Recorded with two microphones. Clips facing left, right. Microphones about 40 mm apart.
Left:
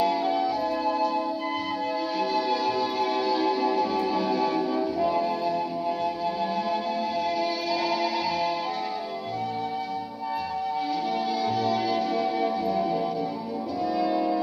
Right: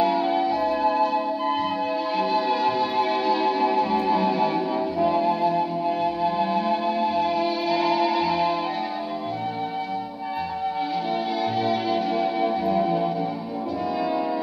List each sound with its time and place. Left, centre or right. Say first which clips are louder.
0.0 s music: right 3 dB; right
11.6 s music: right 2 dB; right